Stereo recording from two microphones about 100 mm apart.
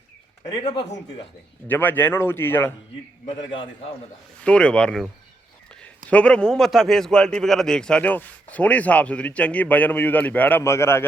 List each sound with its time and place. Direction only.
0.6 s speech: 60° left (ahead or behind)
1.6 s a man's voice: 20° left (ahead or behind)
4.4 s a man's voice: 10° left (ahead or behind)
10.6 s a man's voice: 25° left (ahead or behind)